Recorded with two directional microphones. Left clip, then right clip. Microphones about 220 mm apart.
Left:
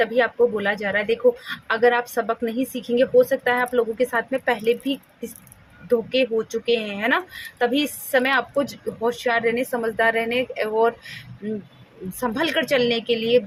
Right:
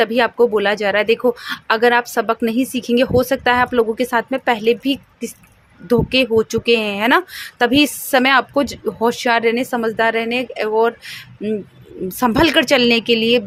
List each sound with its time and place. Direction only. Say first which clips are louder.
0.0 s speech: right 4 dB; 40° right (ahead or behind)